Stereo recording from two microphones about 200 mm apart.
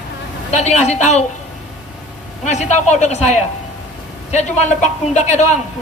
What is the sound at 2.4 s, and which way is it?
A man's voice, 35° left (ahead or behind).